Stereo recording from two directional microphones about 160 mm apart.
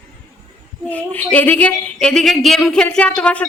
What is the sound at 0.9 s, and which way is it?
A woman's voice, 10° left (ahead or behind).